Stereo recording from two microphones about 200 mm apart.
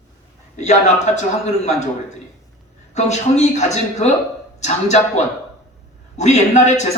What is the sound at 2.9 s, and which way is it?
A man's voice, 35° left (ahead or behind).